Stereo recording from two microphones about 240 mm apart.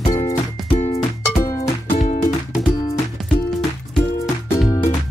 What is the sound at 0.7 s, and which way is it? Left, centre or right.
Music, left.